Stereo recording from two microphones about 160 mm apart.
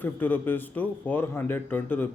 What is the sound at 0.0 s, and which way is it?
Speech, 10° left (ahead or behind).